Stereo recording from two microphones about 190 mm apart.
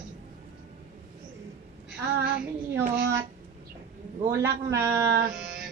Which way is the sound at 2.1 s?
55° right (ahead or behind).